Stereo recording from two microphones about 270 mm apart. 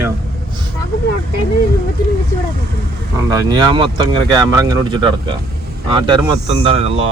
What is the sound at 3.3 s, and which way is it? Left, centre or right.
Speech, centre.